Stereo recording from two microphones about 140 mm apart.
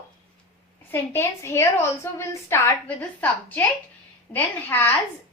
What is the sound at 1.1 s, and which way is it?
A woman's voice, 20° left (ahead or behind).